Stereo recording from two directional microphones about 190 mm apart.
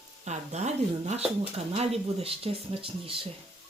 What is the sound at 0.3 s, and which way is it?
Speech, 35° right (ahead or behind).